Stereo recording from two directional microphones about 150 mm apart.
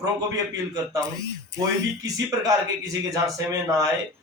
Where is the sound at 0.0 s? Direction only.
25° right (ahead or behind).